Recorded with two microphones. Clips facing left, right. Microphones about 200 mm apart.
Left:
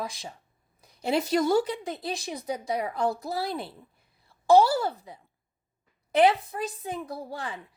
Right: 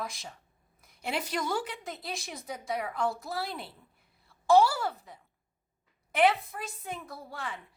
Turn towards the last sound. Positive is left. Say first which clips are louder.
# left 5 dB
turn(degrees=35)  # may be behind; listen again after turning